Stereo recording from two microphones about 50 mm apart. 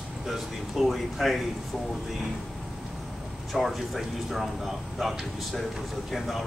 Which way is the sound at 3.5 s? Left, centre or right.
Centre.